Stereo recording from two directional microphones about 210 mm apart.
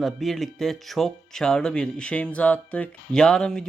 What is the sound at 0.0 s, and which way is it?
Speech, centre (ahead or behind).